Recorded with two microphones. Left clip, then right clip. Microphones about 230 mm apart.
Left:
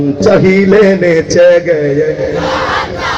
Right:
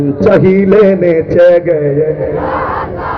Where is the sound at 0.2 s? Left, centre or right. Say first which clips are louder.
Even; left.